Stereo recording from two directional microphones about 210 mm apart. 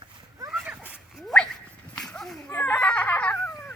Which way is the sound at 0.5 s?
Centre (ahead or behind).